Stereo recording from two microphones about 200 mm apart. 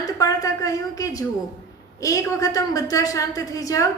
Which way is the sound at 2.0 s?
15° left (ahead or behind).